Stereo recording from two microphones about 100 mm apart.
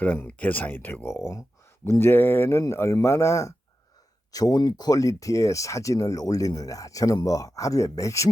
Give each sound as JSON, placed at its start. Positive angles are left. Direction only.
{"t": 0.0, "sound": "speech", "side_deg": 15}